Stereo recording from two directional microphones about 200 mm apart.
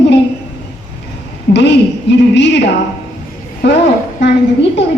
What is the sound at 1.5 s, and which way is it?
A child's voice, 60° left (ahead or behind).